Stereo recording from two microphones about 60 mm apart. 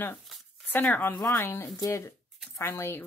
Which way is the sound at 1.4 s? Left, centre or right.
Left.